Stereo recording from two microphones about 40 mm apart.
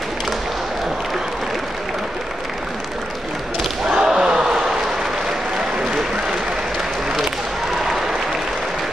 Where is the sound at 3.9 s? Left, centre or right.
Right.